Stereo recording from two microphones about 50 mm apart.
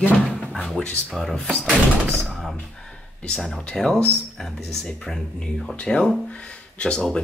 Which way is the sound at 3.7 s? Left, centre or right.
Centre.